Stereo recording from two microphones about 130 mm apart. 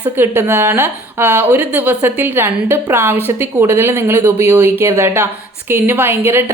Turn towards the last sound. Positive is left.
turn(degrees=-20)  # may be behind; listen again after turning